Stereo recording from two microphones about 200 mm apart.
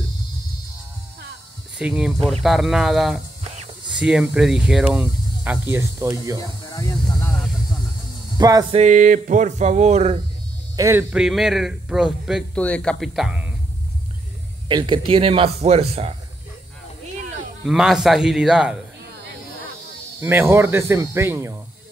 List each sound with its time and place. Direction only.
1.8 s speech: 5° right (ahead or behind)
6.4 s speech: 15° left (ahead or behind)
8.4 s speech: 20° right (ahead or behind)
8.7 s a sound: 40° right (ahead or behind)
10.8 s speech: 10° right (ahead or behind)
14.7 s speech: 20° right (ahead or behind)
17.6 s speech: centre (ahead or behind)
20.2 s speech: 10° right (ahead or behind)